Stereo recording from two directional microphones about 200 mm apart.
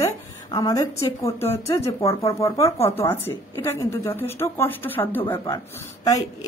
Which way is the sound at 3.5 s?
15° left (ahead or behind).